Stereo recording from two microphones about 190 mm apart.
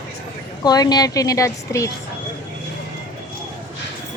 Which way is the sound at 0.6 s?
20° left (ahead or behind).